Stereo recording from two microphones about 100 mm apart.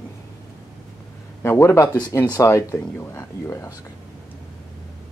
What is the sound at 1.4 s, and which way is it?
Speech, 25° left (ahead or behind).